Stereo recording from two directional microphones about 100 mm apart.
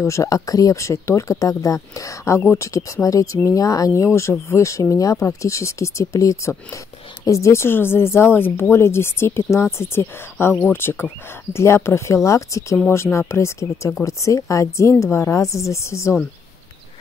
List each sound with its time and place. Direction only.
0.0 s a woman's voice: 30° left (ahead or behind)